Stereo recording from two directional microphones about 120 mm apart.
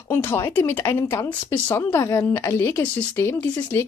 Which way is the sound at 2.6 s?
15° left (ahead or behind).